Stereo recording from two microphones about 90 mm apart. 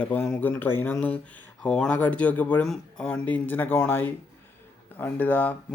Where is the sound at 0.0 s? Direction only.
20° left (ahead or behind).